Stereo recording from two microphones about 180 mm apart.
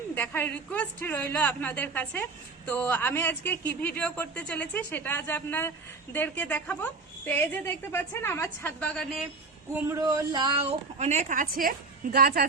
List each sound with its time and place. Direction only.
0.1 s speech: 10° left (ahead or behind)
9.8 s a woman's voice: 20° right (ahead or behind); by 12.5 s 60° right (ahead or behind)